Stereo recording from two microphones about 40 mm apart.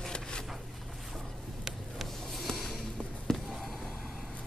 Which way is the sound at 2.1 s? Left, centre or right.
Centre.